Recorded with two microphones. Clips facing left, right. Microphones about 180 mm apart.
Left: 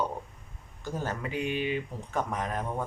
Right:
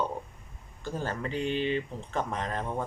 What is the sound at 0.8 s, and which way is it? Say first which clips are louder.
Speech: even; 15° left (ahead or behind).